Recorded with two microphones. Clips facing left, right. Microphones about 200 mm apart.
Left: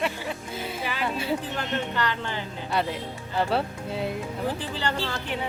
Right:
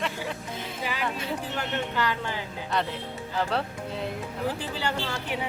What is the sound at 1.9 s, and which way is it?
Speech, 5° right (ahead or behind).